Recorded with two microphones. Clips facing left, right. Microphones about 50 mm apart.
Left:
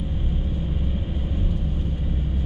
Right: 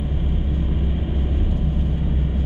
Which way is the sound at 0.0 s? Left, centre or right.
Right.